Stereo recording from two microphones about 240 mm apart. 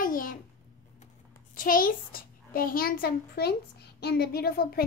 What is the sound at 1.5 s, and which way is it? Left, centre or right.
A child's voice, left.